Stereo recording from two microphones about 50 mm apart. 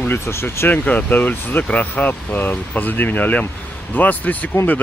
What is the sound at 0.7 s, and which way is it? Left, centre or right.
Speech, left.